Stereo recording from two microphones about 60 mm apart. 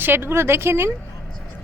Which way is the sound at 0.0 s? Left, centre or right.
Right.